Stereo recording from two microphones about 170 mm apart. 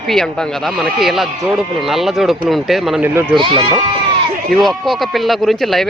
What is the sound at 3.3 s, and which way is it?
Speech, 30° right (ahead or behind).